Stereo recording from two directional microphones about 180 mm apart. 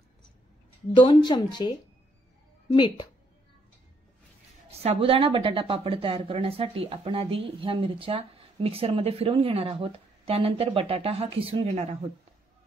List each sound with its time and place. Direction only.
0.9 s speech: 25° left (ahead or behind)
4.6 s a woman's voice: 35° right (ahead or behind)